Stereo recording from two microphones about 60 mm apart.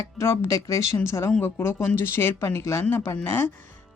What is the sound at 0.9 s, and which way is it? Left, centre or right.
Speech, left.